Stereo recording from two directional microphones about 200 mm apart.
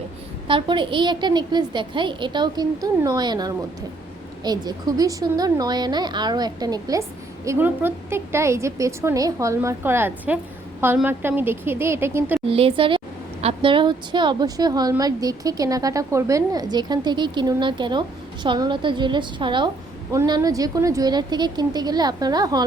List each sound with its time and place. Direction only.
0.4 s a woman's voice: 25° right (ahead or behind)
12.5 s a woman's voice: 30° right (ahead or behind)